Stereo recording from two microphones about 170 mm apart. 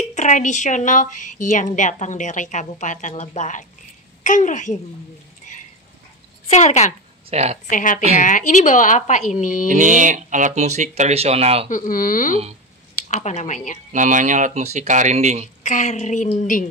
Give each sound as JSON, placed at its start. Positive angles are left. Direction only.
{"t": 0.1, "sound": "a woman's voice", "side_deg": 45}
{"t": 6.5, "sound": "a woman's voice", "side_deg": 40}
{"t": 7.2, "sound": "speech", "side_deg": -40}
{"t": 7.7, "sound": "a woman's voice", "side_deg": 50}
{"t": 9.7, "sound": "speech", "side_deg": -50}
{"t": 11.7, "sound": "a woman's voice", "side_deg": 50}
{"t": 13.9, "sound": "speech", "side_deg": -50}
{"t": 15.6, "sound": "a woman's voice", "side_deg": 45}